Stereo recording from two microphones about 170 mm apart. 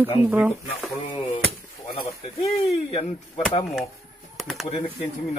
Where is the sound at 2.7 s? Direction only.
35° left (ahead or behind).